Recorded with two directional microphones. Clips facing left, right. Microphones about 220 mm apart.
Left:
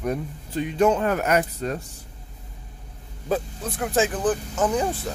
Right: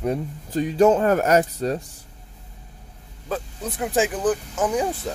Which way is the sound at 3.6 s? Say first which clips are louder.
Right 4 dB; 15° right (ahead or behind).